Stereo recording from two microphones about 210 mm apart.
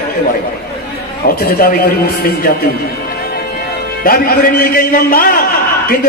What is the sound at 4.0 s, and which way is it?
A man's voice, 45° left (ahead or behind).